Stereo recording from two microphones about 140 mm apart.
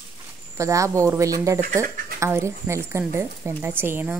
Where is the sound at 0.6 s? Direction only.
20° right (ahead or behind).